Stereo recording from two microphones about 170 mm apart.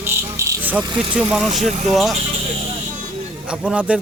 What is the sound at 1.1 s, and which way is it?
Speech, 5° right (ahead or behind).